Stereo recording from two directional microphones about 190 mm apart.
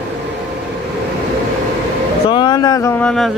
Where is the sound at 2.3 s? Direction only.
25° left (ahead or behind); by 3.3 s 5° left (ahead or behind).